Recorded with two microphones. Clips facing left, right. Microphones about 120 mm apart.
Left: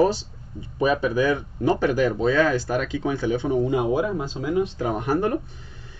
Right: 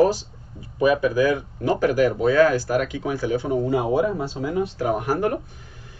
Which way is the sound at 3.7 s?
30° right (ahead or behind).